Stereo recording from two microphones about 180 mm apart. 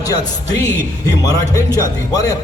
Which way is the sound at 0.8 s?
20° left (ahead or behind).